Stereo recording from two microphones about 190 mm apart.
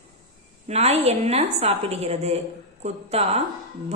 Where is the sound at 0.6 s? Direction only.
35° right (ahead or behind).